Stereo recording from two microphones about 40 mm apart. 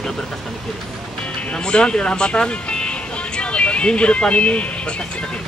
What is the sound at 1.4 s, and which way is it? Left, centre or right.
Speech, left.